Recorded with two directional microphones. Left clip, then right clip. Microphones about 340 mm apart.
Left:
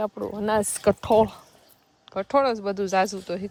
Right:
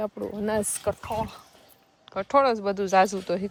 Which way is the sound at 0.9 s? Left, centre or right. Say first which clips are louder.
Left 9 dB; left.